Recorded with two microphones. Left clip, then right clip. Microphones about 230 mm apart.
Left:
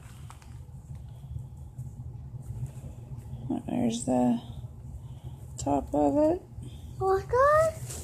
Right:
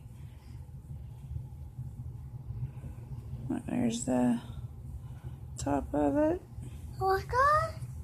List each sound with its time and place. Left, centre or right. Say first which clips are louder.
3.4 s a sound: left 3 dB; centre
5.6 s speech: left 4 dB; centre
7.0 s a child's voice: left 3 dB; right